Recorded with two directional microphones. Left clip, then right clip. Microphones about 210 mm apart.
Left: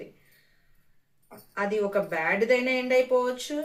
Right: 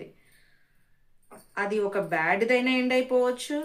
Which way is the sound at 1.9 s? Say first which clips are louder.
Right 1 dB; 40° right (ahead or behind).